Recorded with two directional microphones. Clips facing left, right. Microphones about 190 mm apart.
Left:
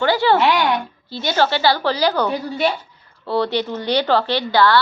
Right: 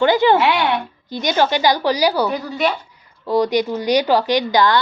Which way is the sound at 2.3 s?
30° left (ahead or behind).